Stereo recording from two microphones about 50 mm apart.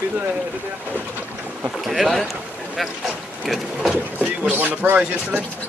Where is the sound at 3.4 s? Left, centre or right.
Centre.